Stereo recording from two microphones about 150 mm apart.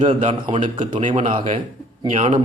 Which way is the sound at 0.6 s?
50° right (ahead or behind).